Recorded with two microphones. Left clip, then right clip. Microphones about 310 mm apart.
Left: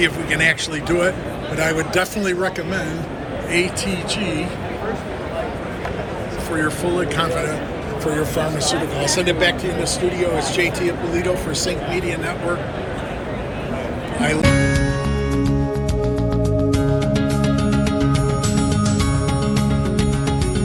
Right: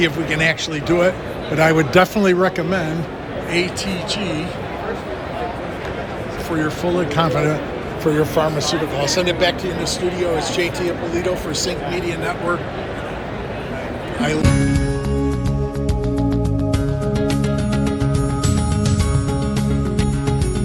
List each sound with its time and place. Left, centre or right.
0.0 s speech: centre
1.5 s a man's voice: right
3.5 s speech: centre
6.6 s speech: centre
14.2 s music: centre
16.7 s music: centre